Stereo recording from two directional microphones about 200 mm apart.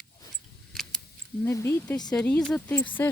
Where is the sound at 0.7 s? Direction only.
Centre (ahead or behind).